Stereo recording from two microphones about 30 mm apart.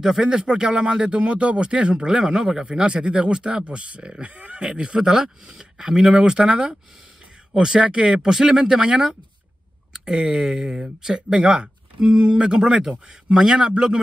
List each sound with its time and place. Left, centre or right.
0.2 s speech: right
4.2 s speech: right
4.6 s speech: right
10.1 s speech: right
12.8 s speech: centre